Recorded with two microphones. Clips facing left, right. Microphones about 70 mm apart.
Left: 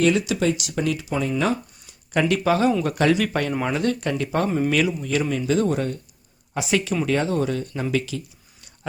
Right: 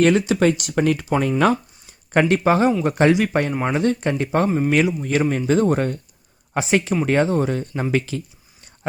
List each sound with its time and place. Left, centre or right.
0.0 s speech: right
1.9 s speech: right
4.4 s speech: centre
5.0 s speech: right
6.7 s speech: right